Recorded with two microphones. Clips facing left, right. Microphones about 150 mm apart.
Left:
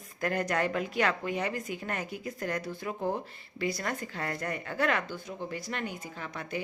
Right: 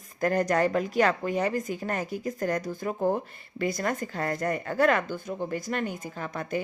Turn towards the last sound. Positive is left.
turn(degrees=-45)  # may be behind; listen again after turning